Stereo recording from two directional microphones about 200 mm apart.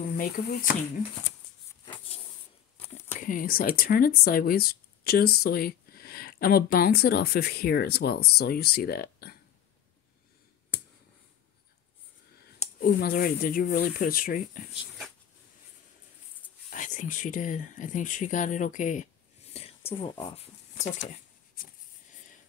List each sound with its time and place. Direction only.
0.1 s speech: 50° left (ahead or behind)
3.1 s speech: 40° left (ahead or behind)
12.5 s speech: 40° left (ahead or behind)
16.7 s speech: 40° left (ahead or behind)
21.0 s a sound: 50° left (ahead or behind)